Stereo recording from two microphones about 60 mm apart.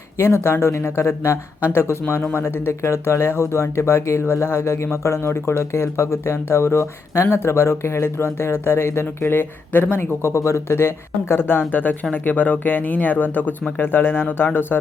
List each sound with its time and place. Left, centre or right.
0.2 s speech: left
2.6 s speech: left
7.1 s speech: left
7.3 s speech: left
10.2 s speech: left
10.8 s speech: left